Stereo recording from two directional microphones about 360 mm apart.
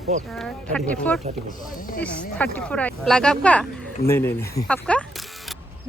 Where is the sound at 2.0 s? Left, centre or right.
Centre.